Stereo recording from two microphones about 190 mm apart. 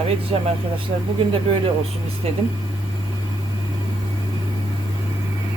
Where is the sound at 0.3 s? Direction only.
30° right (ahead or behind).